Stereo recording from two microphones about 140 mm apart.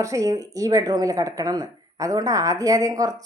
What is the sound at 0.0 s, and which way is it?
Speech, 25° right (ahead or behind).